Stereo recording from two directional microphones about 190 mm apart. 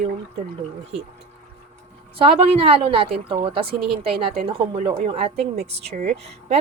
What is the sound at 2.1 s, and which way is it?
Speech, 30° right (ahead or behind).